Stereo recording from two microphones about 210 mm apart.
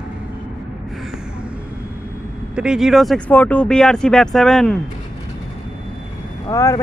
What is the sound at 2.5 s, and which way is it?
Speech, 5° right (ahead or behind).